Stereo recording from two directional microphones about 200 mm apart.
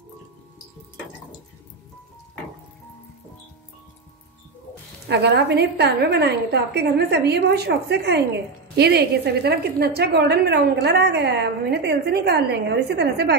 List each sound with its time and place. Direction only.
5.0 s a woman's voice: 55° right (ahead or behind)